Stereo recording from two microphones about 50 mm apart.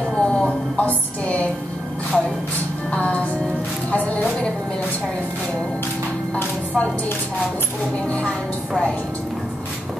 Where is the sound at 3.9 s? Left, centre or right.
Left.